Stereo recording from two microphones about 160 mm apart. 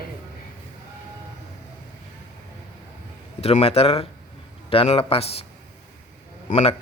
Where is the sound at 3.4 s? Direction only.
40° left (ahead or behind).